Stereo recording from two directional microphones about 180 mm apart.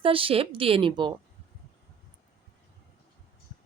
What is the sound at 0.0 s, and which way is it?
A woman's voice, 30° right (ahead or behind).